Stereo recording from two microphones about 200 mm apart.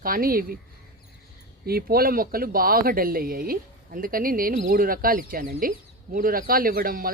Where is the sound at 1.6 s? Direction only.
50° right (ahead or behind).